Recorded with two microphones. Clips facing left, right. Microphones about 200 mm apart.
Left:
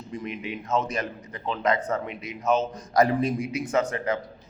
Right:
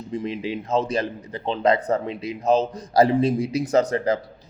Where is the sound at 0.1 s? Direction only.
30° right (ahead or behind).